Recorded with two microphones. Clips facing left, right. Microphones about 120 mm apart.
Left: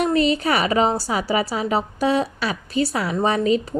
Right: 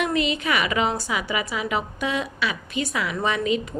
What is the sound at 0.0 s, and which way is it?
A woman's voice, 35° left (ahead or behind).